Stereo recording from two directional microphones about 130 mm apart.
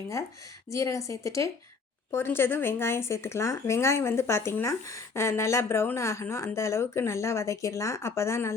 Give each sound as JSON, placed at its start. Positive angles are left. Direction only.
{"t": 0.7, "sound": "speech", "side_deg": 25}